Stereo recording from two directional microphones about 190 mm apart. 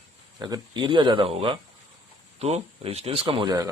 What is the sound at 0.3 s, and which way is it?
Speech, 20° right (ahead or behind).